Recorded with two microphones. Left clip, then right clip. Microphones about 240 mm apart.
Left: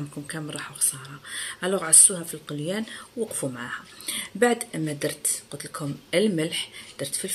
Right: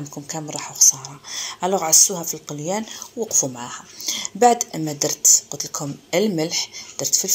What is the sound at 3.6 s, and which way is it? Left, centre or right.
Speech, centre.